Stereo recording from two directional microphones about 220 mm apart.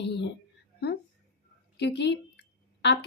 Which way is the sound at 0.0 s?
50° left (ahead or behind).